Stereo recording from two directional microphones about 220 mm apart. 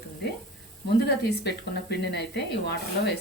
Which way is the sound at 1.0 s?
50° left (ahead or behind).